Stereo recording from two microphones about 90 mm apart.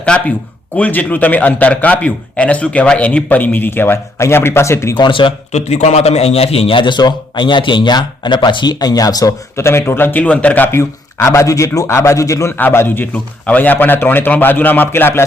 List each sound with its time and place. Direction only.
0.0 s a man's voice: 10° left (ahead or behind); by 4.9 s 30° left (ahead or behind)
4.9 s speech: 60° left (ahead or behind)
6.3 s speech: 90° left; by 9.3 s 45° left (ahead or behind)
9.6 s a man's voice: 30° left (ahead or behind)
12.5 s a man's voice: 25° left (ahead or behind)